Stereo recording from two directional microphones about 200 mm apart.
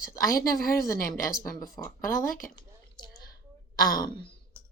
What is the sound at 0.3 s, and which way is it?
Speech, 45° left (ahead or behind).